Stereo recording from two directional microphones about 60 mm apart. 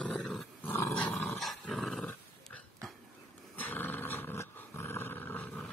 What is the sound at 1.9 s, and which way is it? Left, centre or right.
Dog, left.